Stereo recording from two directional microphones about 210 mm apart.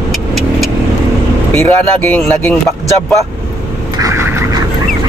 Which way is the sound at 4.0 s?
15° right (ahead or behind).